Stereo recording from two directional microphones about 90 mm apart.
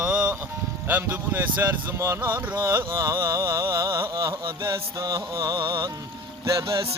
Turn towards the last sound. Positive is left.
turn(degrees=-40)  # may be behind; listen again after turning